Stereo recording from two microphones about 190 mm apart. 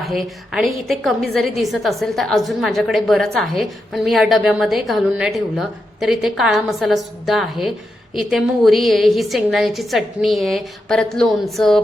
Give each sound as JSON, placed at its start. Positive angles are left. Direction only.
{"t": 0.0, "sound": "a woman's voice", "side_deg": 0}